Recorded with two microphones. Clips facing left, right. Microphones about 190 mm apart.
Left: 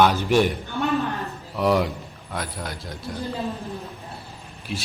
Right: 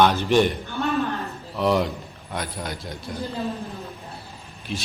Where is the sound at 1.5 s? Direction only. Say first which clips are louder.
Left 1 dB; 10° left (ahead or behind).